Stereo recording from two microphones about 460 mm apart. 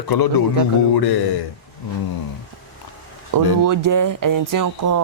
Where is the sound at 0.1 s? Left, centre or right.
Left.